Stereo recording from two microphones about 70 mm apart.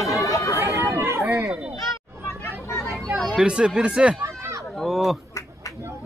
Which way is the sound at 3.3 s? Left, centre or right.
Centre.